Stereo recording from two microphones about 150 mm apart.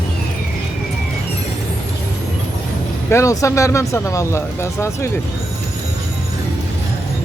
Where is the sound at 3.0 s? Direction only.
20° left (ahead or behind).